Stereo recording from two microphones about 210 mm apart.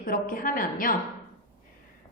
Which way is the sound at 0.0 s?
45° left (ahead or behind).